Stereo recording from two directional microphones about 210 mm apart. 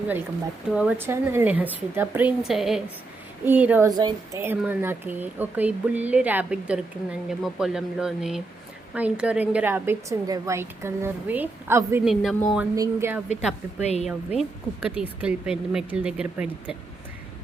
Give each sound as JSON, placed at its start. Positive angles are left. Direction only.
{"t": 0.7, "sound": "speech", "side_deg": -5}
{"t": 12.0, "sound": "speech", "side_deg": 0}
{"t": 12.7, "sound": "speech", "side_deg": -15}
{"t": 13.8, "sound": "speech", "side_deg": 30}
{"t": 14.3, "sound": "speech", "side_deg": -5}